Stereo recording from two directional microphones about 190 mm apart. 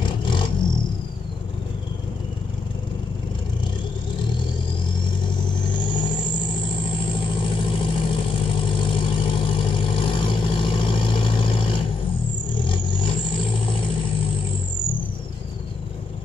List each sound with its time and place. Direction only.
0.0 s vehicle: 25° left (ahead or behind)
5.7 s vehicle: 25° left (ahead or behind)